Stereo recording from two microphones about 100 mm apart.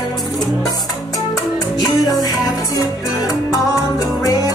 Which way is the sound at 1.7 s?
40° left (ahead or behind).